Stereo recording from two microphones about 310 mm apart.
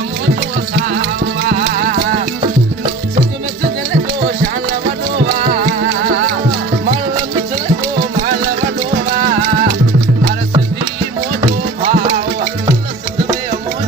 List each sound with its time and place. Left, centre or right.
0.9 s music: right
5.1 s music: right
11.8 s music: right